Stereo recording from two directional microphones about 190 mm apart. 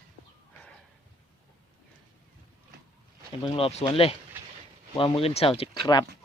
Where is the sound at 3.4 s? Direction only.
30° left (ahead or behind).